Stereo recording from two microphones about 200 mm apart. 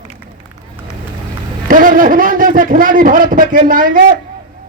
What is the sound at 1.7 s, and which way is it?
A man's voice, 45° right (ahead or behind).